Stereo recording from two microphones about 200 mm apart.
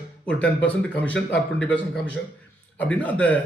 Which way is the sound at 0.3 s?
5° left (ahead or behind).